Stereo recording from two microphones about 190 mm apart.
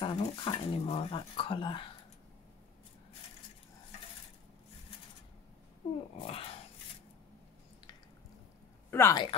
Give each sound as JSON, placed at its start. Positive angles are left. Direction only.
{"t": 0.0, "sound": "speech", "side_deg": 25}
{"t": 6.1, "sound": "speech", "side_deg": 30}
{"t": 8.9, "sound": "speech", "side_deg": 15}